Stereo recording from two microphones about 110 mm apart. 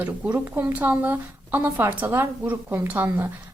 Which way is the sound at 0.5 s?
15° right (ahead or behind).